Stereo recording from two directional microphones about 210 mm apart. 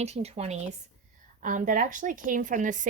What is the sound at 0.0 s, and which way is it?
A woman's voice, 30° right (ahead or behind).